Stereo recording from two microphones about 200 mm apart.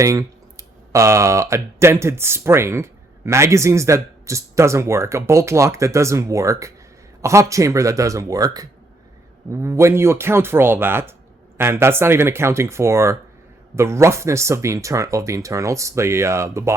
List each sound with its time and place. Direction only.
0.0 s speech: 15° right (ahead or behind)